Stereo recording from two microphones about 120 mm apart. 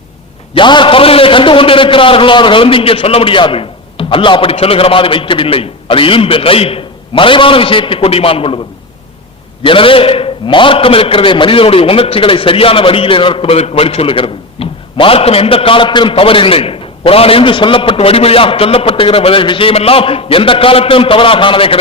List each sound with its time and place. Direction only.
0.5 s a man's voice: 40° left (ahead or behind)
9.6 s a man's voice: 45° left (ahead or behind)